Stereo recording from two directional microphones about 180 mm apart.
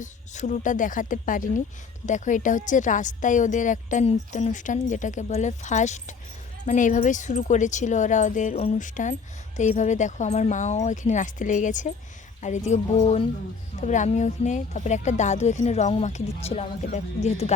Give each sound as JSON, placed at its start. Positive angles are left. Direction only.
{"t": 0.0, "sound": "a woman's voice", "side_deg": 40}